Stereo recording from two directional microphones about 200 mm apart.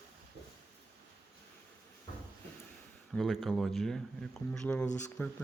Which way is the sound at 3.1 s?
Centre (ahead or behind).